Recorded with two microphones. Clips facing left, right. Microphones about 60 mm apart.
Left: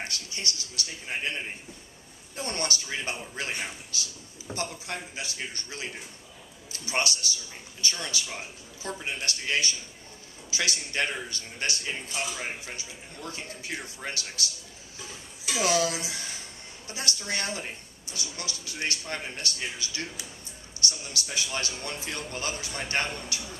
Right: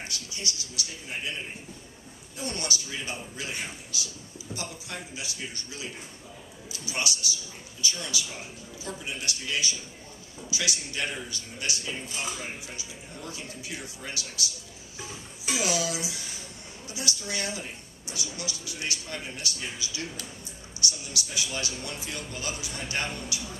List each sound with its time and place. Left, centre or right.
0.0 s speech: left
2.3 s speech: left
15.1 s speech: right
15.6 s speech: left